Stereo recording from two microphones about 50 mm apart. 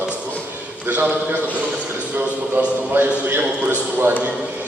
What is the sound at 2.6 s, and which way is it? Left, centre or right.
Speech, right.